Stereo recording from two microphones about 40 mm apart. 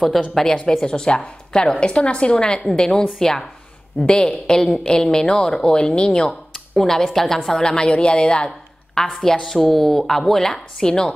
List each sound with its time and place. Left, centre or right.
0.3 s a woman's voice: centre
3.9 s a woman's voice: left
4.8 s speech: centre
8.5 s speech: centre